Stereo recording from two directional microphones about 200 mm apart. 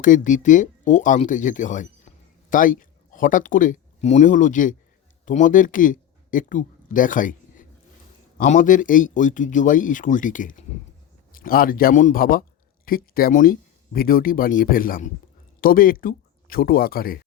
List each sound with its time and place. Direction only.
0.0 s speech: 40° left (ahead or behind)